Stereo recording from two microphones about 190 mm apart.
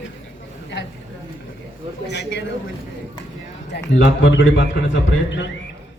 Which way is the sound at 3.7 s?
75° left (ahead or behind).